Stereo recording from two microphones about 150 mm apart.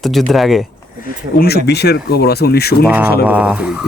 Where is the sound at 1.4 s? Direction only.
90° left.